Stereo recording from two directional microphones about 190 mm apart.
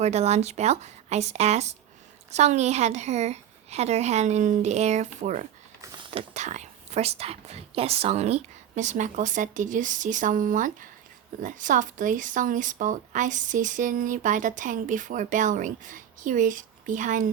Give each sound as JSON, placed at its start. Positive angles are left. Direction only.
{"t": 0.0, "sound": "a woman's voice", "side_deg": -35}
{"t": 5.8, "sound": "a sound", "side_deg": -20}
{"t": 6.1, "sound": "a woman's voice", "side_deg": -35}